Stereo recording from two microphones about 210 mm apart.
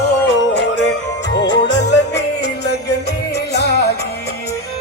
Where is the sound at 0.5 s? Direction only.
55° left (ahead or behind).